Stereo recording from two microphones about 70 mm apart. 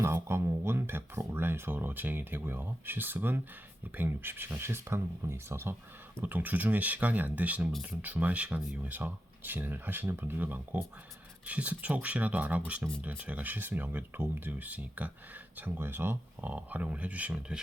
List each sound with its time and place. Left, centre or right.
0.0 s speech: right
6.1 s speech: right